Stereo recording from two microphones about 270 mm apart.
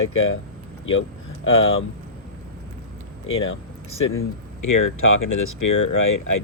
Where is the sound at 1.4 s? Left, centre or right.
Left.